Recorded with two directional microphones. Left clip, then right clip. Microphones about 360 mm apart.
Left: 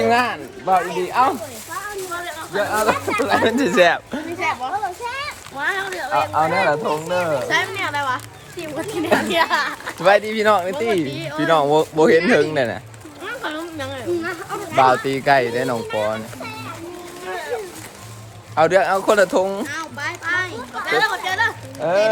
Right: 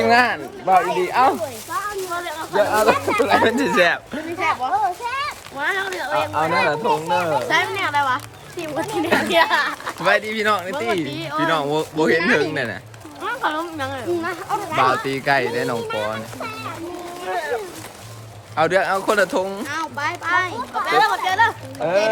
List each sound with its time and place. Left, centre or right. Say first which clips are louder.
0.0 s speech: right 2 dB; centre
1.7 s a sound: right 2 dB; centre
2.6 s speech: right 3 dB; centre
10.0 s speech: left 3 dB; centre
11.1 s speech: even; centre
11.3 s speech: left 4 dB; centre
13.2 s speech: right 4 dB; centre
14.8 s speech: left 3 dB; centre
17.2 s a sound: right 3 dB; centre
18.5 s speech: left 3 dB; centre
19.6 s speech: right 2 dB; centre